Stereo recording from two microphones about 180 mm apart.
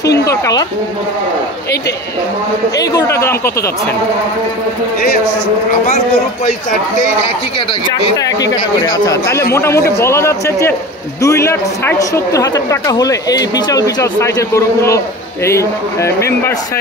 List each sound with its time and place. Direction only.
0.2 s speech: 20° left (ahead or behind)
2.8 s a man's voice: 20° left (ahead or behind)
8.2 s a woman's voice: 20° left (ahead or behind)